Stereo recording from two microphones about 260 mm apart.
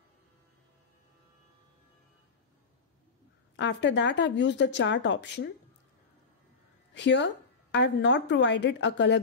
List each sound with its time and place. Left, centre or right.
3.5 s a woman's voice: left
6.9 s a woman's voice: left